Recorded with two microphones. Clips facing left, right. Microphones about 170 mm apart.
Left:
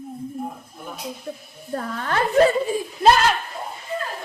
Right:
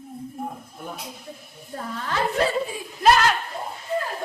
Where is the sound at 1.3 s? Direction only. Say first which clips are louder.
Left 8 dB; 55° left (ahead or behind).